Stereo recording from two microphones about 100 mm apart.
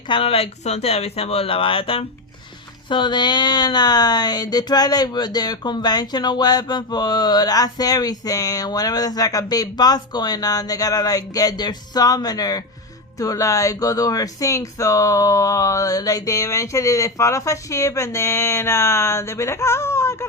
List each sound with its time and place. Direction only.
0.1 s speech: 70° left (ahead or behind)
2.9 s speech: 50° left (ahead or behind); by 20.2 s 30° left (ahead or behind)